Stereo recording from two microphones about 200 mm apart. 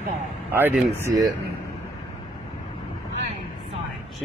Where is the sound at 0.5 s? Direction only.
10° right (ahead or behind).